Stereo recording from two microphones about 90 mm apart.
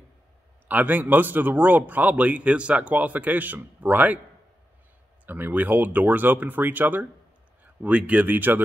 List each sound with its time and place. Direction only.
0.7 s a man's voice: 20° right (ahead or behind)
5.2 s a man's voice: 20° right (ahead or behind)